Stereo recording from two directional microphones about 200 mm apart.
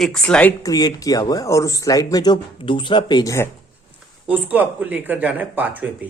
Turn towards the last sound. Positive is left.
turn(degrees=-10)  # may be behind; listen again after turning